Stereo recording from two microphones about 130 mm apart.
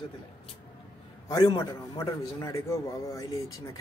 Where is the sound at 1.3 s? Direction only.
30° left (ahead or behind).